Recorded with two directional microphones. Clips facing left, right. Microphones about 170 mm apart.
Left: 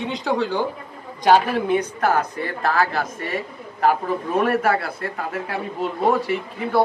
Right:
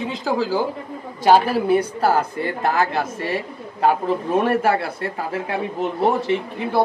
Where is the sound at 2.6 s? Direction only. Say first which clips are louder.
Even; 20° right (ahead or behind).